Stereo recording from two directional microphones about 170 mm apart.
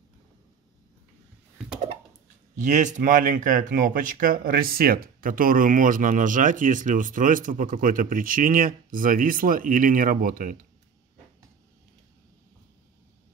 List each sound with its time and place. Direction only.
2.5 s speech: 45° right (ahead or behind)